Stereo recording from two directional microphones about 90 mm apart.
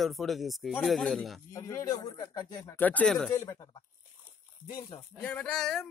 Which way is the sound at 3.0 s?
5° left (ahead or behind).